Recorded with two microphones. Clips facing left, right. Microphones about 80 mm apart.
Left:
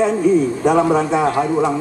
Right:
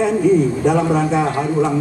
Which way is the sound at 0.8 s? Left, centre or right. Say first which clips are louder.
Left 1 dB; centre.